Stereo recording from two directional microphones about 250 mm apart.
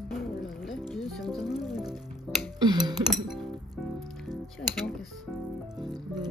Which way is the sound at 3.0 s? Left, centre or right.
Centre.